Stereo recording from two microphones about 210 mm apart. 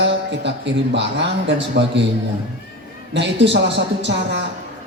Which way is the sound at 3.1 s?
55° right (ahead or behind).